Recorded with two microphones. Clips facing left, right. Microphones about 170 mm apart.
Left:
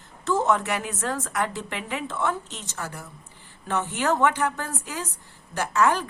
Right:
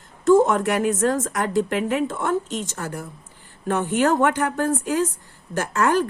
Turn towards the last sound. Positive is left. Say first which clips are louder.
# right 2 dB
turn(degrees=-50)  # may be behind; listen again after turning